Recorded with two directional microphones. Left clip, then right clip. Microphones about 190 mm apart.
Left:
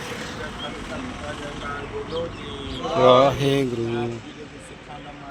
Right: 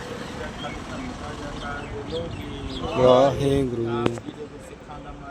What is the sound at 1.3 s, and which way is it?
Vehicle, 25° right (ahead or behind).